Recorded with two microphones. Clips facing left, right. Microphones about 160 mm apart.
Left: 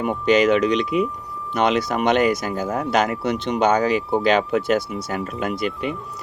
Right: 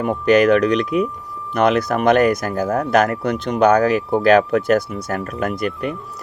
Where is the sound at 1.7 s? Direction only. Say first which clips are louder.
Right 4 dB; 55° right (ahead or behind).